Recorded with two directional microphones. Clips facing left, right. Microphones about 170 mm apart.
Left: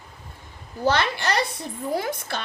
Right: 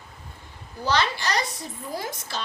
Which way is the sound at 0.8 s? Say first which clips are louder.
Left 2 dB; 55° left (ahead or behind).